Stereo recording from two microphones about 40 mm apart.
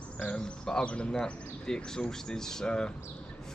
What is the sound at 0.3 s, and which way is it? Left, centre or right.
Speech, centre.